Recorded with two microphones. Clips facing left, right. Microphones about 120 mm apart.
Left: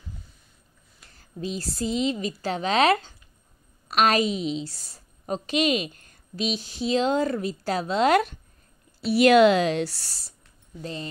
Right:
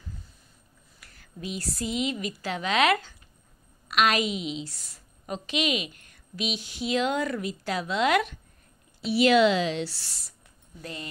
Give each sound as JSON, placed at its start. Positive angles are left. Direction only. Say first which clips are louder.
{"t": 1.0, "sound": "a woman's voice", "louder": "left 5 dB", "side_deg": 30}
{"t": 9.0, "sound": "a woman's voice", "louder": "left 4 dB", "side_deg": 50}